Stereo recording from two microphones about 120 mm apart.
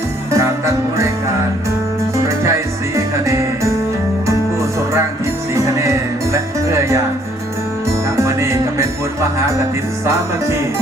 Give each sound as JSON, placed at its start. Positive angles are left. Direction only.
{"t": 0.3, "sound": "music", "side_deg": -25}
{"t": 2.1, "sound": "music", "side_deg": -25}
{"t": 5.5, "sound": "music", "side_deg": -25}
{"t": 8.1, "sound": "music", "side_deg": -25}